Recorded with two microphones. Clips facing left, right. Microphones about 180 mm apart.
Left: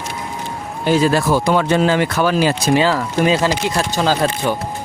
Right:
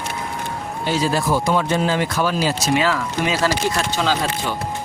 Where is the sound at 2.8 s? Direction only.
30° left (ahead or behind).